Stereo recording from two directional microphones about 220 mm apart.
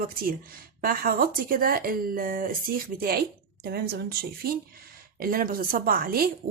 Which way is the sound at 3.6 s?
45° right (ahead or behind).